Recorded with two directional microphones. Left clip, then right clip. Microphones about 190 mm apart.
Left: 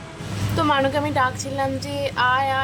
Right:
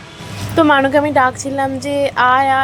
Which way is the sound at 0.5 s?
20° right (ahead or behind).